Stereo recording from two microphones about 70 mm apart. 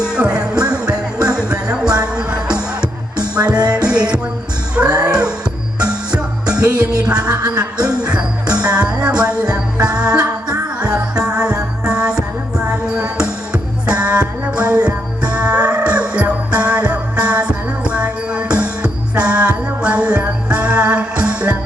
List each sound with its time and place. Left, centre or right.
0.0 s music: centre
4.9 s music: right
5.8 s music: centre
13.1 s music: centre